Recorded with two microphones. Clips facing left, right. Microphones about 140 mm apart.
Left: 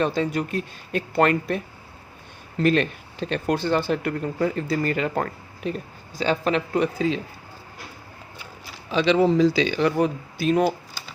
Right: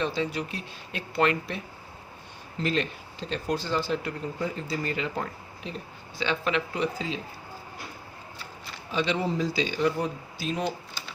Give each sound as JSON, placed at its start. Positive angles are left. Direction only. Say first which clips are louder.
{"t": 0.0, "sound": "speech", "louder": "left 6 dB", "side_deg": 50}
{"t": 2.6, "sound": "speech", "louder": "left 8 dB", "side_deg": 60}
{"t": 6.1, "sound": "speech", "louder": "left 5 dB", "side_deg": 40}
{"t": 8.9, "sound": "speech", "louder": "left 9 dB", "side_deg": 90}